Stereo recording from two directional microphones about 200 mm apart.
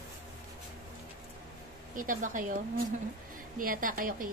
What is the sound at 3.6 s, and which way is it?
Speech, 45° right (ahead or behind).